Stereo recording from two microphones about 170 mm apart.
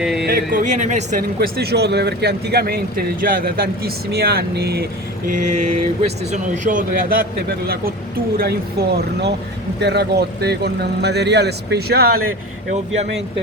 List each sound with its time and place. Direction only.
0.0 s music: centre (ahead or behind)
0.3 s speech: 55° right (ahead or behind)
1.4 s a man's voice: 70° right (ahead or behind)
5.5 s vehicle: 40° right (ahead or behind)
6.3 s speech: 50° right (ahead or behind)
8.4 s a man's voice: 70° right (ahead or behind)